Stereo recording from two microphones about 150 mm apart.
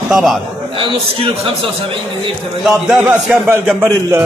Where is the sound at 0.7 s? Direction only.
35° right (ahead or behind).